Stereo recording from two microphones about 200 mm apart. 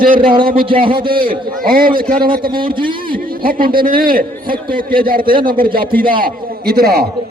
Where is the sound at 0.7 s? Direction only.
25° right (ahead or behind).